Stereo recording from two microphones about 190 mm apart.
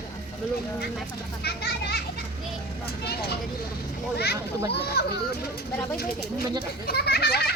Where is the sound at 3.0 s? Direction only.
55° left (ahead or behind).